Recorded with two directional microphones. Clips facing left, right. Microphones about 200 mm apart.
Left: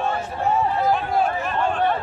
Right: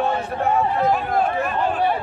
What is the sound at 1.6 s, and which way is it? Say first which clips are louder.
Chatter: left 1 dB; 10° right (ahead or behind).